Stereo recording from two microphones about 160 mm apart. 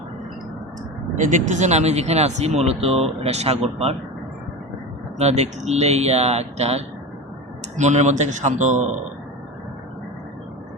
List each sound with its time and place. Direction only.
1.2 s speech: 50° right (ahead or behind)
5.1 s speech: 40° right (ahead or behind)